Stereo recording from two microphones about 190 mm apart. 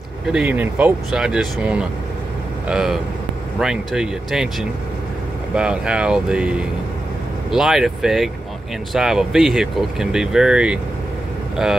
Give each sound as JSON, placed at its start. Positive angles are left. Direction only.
{"t": 0.3, "sound": "speech", "side_deg": -5}
{"t": 7.5, "sound": "speech", "side_deg": 0}